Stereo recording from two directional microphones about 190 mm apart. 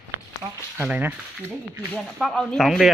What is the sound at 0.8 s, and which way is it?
Speech, 10° right (ahead or behind).